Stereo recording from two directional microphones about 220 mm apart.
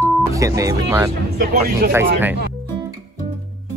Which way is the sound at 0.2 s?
15° right (ahead or behind).